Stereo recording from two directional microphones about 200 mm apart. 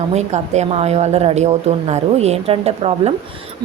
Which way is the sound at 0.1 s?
35° right (ahead or behind).